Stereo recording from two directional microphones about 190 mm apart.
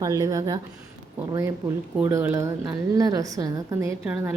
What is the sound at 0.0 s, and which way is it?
Speech, 20° right (ahead or behind).